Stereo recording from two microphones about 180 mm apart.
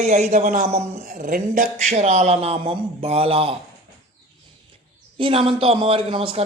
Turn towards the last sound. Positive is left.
turn(degrees=-30)  # may be behind; listen again after turning